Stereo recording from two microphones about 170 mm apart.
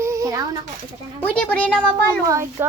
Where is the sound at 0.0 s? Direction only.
20° right (ahead or behind).